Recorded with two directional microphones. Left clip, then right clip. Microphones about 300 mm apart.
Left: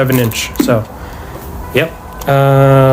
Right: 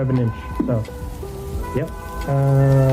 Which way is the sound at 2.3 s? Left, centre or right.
Left.